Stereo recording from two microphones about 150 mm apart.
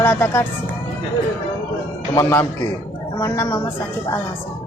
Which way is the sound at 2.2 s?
25° left (ahead or behind).